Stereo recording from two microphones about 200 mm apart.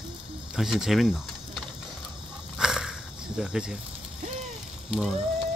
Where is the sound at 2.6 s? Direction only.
5° right (ahead or behind).